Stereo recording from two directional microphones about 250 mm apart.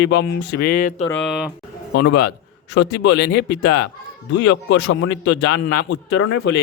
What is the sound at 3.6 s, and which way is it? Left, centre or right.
Speech, left.